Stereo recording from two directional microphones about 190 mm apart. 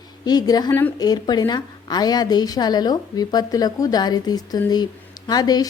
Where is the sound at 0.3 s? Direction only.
20° left (ahead or behind).